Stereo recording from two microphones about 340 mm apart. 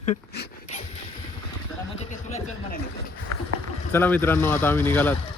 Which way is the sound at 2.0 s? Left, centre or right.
Left.